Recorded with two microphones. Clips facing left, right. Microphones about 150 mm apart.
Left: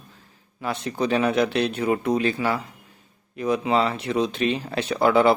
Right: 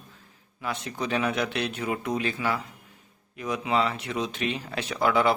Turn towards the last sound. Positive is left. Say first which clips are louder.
# left 5 dB
turn(degrees=30)  # may be behind; listen again after turning